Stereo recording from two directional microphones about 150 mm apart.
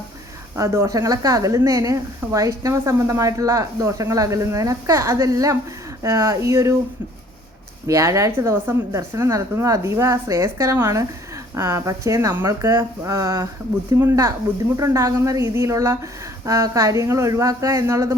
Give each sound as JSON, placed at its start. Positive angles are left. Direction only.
{"t": 0.5, "sound": "a woman's voice", "side_deg": -20}
{"t": 7.9, "sound": "a woman's voice", "side_deg": -20}